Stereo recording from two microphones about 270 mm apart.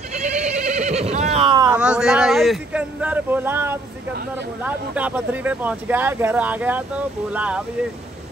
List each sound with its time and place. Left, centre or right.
0.1 s neigh: right
1.7 s speech: centre